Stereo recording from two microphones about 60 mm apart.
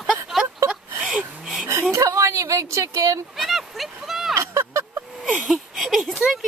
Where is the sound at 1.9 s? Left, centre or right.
Right.